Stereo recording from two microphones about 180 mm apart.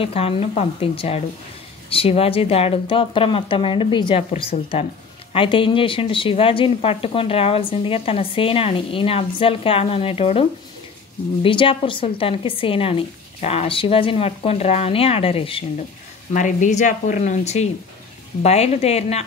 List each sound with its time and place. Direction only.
0.0 s speech: 35° left (ahead or behind)
11.4 s speech: 30° left (ahead or behind)
16.3 s speech: 45° left (ahead or behind)